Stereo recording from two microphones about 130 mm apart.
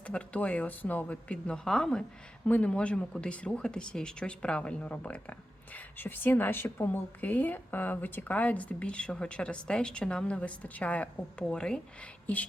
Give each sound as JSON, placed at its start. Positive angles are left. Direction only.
{"t": 0.1, "sound": "a woman's voice", "side_deg": 10}